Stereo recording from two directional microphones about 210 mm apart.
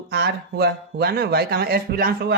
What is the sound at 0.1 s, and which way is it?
Speech, 50° right (ahead or behind).